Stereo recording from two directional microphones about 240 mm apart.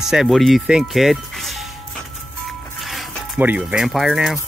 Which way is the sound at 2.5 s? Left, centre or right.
Centre.